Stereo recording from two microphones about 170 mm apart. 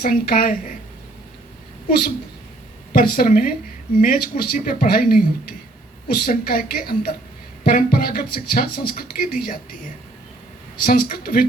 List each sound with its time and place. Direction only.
0.0 s speech: 60° left (ahead or behind)
1.9 s speech: 60° left (ahead or behind)
10.8 s speech: 60° left (ahead or behind)